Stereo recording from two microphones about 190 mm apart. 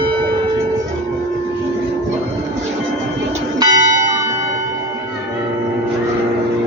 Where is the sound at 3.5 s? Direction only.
20° right (ahead or behind).